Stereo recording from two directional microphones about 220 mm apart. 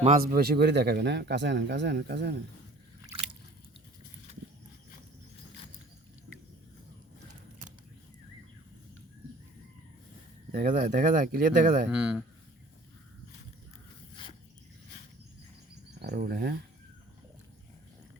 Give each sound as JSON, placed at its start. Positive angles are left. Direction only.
{"t": 0.0, "sound": "speech", "side_deg": -35}
{"t": 10.7, "sound": "speech", "side_deg": -35}
{"t": 11.9, "sound": "speech", "side_deg": -5}
{"t": 16.0, "sound": "speech", "side_deg": -45}